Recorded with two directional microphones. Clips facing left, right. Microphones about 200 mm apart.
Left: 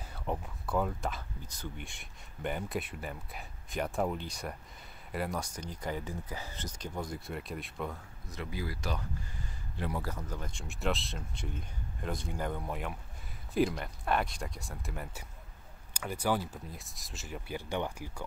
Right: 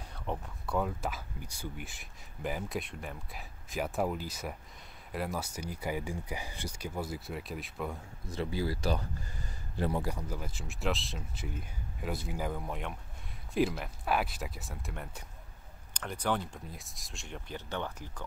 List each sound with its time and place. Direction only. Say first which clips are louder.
0.0 s speech: left 1 dB; 5° left (ahead or behind)
8.3 s speech: right 5 dB; 30° right (ahead or behind)
9.9 s speech: right 3 dB; 15° right (ahead or behind); by 18.2 s 10° left (ahead or behind)